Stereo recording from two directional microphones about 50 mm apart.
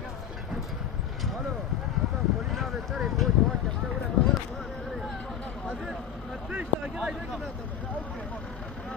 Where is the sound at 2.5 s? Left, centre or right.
Centre.